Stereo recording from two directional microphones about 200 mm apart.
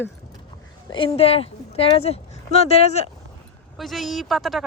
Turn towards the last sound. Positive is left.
turn(degrees=0)  # may be behind; listen again after turning